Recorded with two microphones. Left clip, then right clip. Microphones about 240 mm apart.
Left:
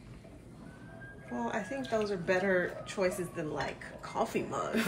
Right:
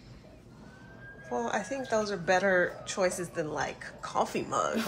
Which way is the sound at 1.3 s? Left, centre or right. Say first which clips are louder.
Right 4 dB; centre.